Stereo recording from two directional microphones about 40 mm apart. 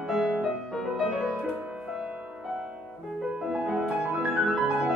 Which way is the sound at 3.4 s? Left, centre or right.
Centre.